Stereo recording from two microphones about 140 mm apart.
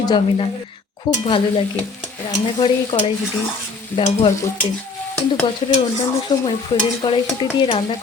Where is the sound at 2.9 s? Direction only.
30° left (ahead or behind).